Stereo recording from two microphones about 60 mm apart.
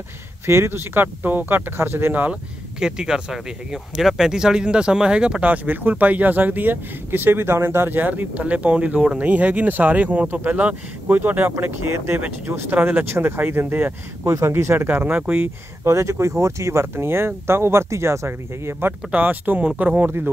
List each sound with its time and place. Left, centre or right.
0.5 s speech: right
2.8 s speech: centre; by 12.7 s right
12.7 s speech: right
13.1 s speech: right
14.2 s speech: right
15.0 s speech: right
15.8 s speech: right
19.1 s speech: right